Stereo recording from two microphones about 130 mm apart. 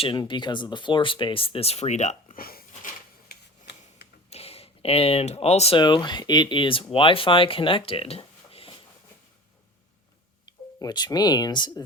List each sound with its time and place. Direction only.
0.0 s speech: 40° left (ahead or behind); by 2.4 s 65° left (ahead or behind)
4.3 s a sound: 50° left (ahead or behind)
5.7 s speech: 35° left (ahead or behind)
10.8 s speech: 30° left (ahead or behind)